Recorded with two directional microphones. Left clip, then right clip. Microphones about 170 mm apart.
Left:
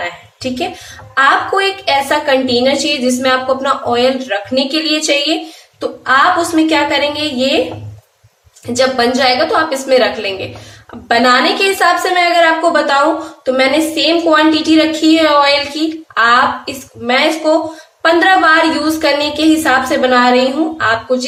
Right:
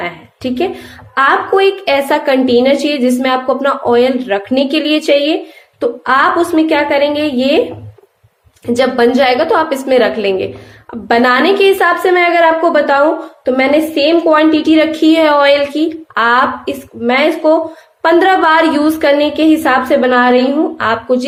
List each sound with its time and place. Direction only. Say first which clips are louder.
0.0 s a woman's voice: right 1 dB; 45° right (ahead or behind)
8.7 s a woman's voice: right 2 dB; 45° right (ahead or behind)